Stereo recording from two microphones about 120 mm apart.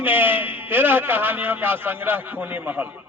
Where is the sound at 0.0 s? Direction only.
15° right (ahead or behind).